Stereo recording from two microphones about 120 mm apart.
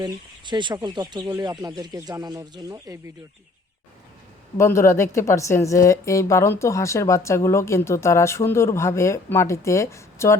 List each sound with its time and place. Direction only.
0.0 s speech: 40° right (ahead or behind)
4.5 s a woman's voice: 25° left (ahead or behind)